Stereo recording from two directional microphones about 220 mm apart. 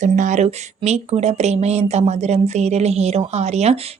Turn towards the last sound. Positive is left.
turn(degrees=-30)  # may be behind; listen again after turning